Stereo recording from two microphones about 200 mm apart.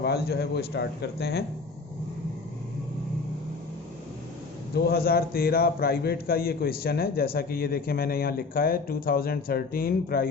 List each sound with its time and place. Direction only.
0.0 s a man's voice: 50° left (ahead or behind)
4.7 s a man's voice: 50° left (ahead or behind)